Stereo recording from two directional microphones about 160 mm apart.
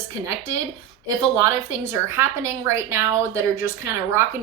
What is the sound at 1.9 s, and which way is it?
A woman's voice, 15° right (ahead or behind).